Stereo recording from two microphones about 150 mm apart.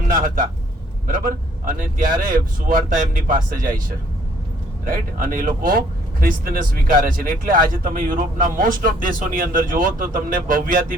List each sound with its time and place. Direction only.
0.1 s a man's voice: 65° right (ahead or behind)
4.9 s speech: 70° right (ahead or behind)